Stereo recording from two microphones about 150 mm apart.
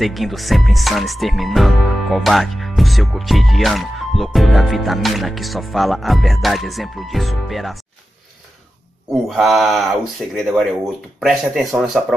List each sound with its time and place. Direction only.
0.0 s music: centre (ahead or behind)
9.3 s music: centre (ahead or behind)